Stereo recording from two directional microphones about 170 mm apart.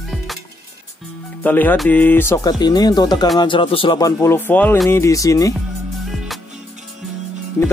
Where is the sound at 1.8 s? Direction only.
10° left (ahead or behind).